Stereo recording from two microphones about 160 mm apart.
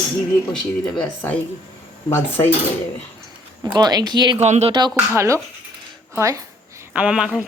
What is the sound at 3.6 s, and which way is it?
Speech, 25° right (ahead or behind).